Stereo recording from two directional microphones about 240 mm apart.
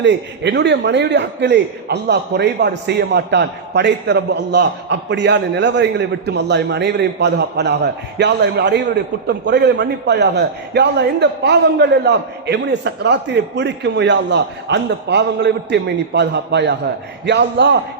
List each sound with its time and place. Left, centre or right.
0.0 s a man's voice: right